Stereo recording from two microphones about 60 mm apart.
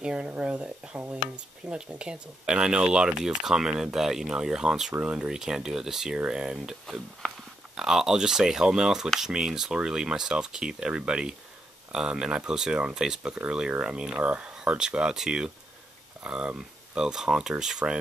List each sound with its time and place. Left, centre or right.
0.0 s speech: centre